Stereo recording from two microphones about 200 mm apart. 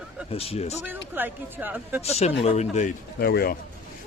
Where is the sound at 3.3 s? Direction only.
50° left (ahead or behind).